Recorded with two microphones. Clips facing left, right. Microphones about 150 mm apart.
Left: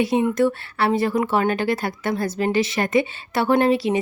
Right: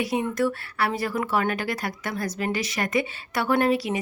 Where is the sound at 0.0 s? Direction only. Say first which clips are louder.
Left 6 dB; 25° left (ahead or behind).